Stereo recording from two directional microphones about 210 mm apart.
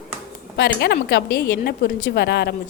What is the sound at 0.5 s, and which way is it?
A woman's voice, 50° left (ahead or behind).